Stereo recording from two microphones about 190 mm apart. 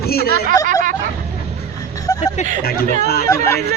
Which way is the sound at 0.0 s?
55° left (ahead or behind).